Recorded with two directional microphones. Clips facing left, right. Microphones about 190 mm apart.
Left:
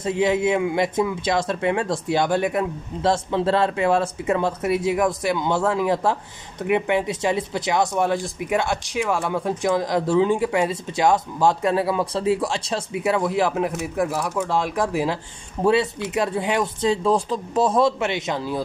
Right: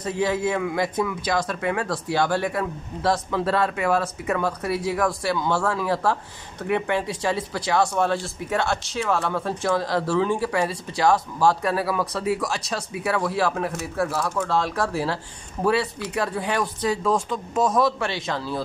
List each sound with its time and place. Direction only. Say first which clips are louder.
0.0 s speech: left 3 dB; 20° left (ahead or behind)